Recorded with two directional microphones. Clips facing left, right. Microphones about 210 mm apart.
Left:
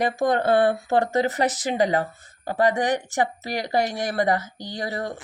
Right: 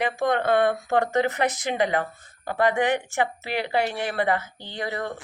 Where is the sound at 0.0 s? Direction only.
40° left (ahead or behind).